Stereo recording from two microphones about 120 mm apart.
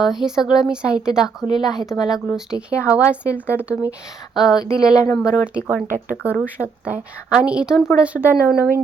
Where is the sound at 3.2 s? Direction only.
20° left (ahead or behind).